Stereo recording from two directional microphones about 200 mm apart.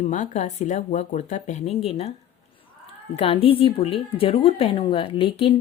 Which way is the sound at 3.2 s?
30° left (ahead or behind).